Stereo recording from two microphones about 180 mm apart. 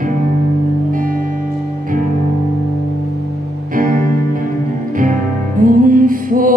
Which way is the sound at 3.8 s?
50° right (ahead or behind).